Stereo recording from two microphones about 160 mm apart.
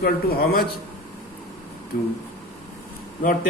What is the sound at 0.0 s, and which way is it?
Speech, 70° left (ahead or behind).